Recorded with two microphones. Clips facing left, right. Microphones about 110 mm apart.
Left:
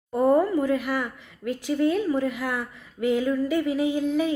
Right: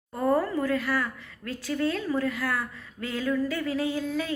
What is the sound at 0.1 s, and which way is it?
Speech, 20° left (ahead or behind).